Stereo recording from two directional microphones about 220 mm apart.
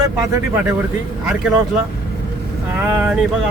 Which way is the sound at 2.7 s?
5° right (ahead or behind).